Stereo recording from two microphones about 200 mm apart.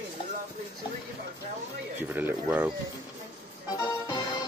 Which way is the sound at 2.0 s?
10° right (ahead or behind).